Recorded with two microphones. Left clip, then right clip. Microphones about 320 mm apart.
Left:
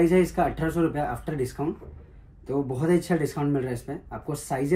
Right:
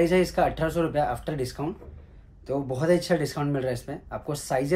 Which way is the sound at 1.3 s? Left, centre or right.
Centre.